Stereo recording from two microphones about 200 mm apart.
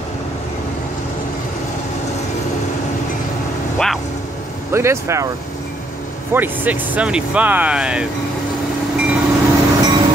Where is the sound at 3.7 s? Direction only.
Centre (ahead or behind).